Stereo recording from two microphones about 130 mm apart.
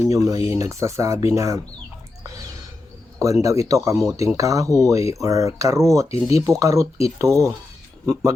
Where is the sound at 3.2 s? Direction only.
25° right (ahead or behind).